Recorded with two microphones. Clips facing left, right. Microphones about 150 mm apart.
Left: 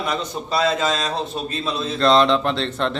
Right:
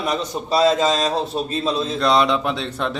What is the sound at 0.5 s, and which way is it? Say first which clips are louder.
Speech: right 4 dB; 35° right (ahead or behind).